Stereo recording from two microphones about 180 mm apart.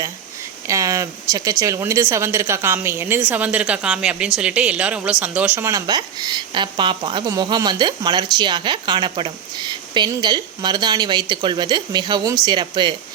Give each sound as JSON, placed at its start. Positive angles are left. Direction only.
{"t": 0.7, "sound": "speech", "side_deg": -20}